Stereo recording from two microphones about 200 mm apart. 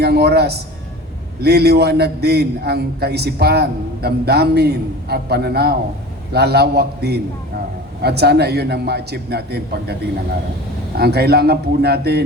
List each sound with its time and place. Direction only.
0.0 s a man's voice: 55° right (ahead or behind)